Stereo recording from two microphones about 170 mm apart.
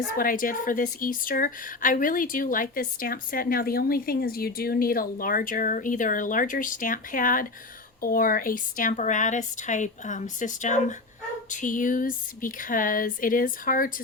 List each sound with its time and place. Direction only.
0.2 s a woman's voice: 55° left (ahead or behind)